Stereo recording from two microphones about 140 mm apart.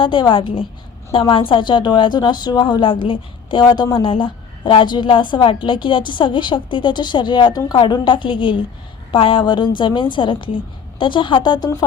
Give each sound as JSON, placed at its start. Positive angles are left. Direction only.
{"t": 0.0, "sound": "a woman's voice", "side_deg": 35}